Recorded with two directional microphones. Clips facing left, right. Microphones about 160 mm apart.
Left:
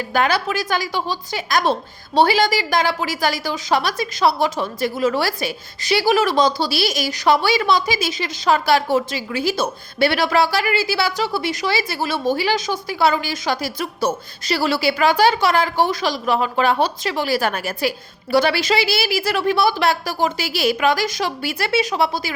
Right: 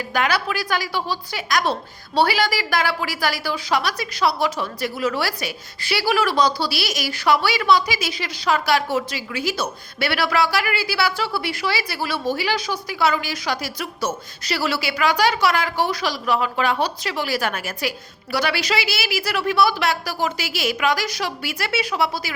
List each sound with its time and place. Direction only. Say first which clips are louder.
0.1 s a woman's voice: left 3 dB; 30° left (ahead or behind)